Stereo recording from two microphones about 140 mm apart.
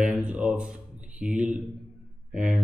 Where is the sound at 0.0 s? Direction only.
10° right (ahead or behind).